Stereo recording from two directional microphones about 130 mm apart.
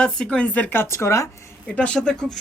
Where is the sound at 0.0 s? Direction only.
5° left (ahead or behind); by 1.3 s 20° left (ahead or behind).